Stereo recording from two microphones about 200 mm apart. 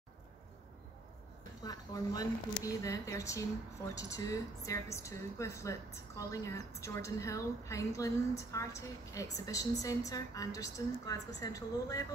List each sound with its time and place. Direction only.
1.6 s a woman's voice: 20° left (ahead or behind)